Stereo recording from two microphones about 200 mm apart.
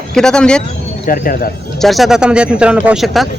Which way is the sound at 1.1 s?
45° left (ahead or behind).